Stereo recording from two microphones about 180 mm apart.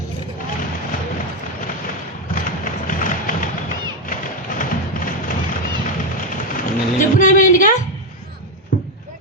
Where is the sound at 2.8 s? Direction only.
45° left (ahead or behind).